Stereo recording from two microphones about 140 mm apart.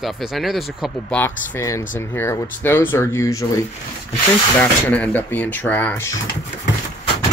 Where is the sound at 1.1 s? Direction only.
15° left (ahead or behind).